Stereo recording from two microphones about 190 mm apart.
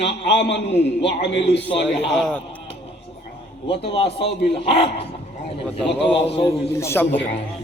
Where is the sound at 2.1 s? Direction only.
5° left (ahead or behind).